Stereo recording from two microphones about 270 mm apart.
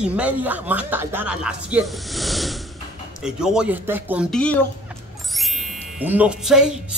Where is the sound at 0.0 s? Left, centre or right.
Centre.